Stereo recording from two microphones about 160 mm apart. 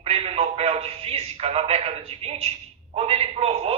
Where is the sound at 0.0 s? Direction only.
40° right (ahead or behind).